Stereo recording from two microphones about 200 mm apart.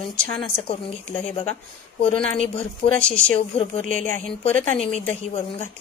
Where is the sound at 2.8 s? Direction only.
55° left (ahead or behind).